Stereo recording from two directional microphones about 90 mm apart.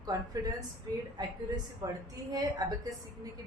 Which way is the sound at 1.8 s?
40° right (ahead or behind).